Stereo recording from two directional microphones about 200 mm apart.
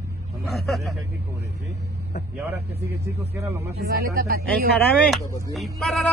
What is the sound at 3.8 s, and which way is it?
Speech, 50° right (ahead or behind).